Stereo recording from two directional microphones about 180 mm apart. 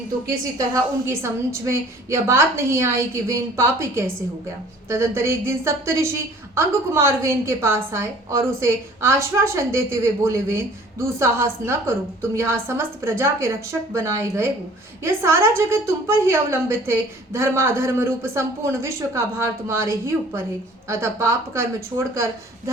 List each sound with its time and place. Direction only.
0.6 s a woman's voice: 15° right (ahead or behind)